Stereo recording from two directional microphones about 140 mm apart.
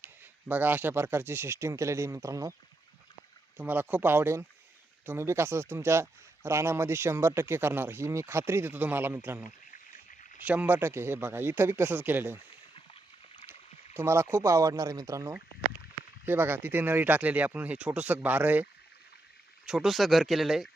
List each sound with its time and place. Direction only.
0.0 s speech: 15° right (ahead or behind)
3.6 s speech: 10° right (ahead or behind)
12.9 s a sound: 45° left (ahead or behind)
13.5 s speech: 15° right (ahead or behind); by 20.7 s centre (ahead or behind)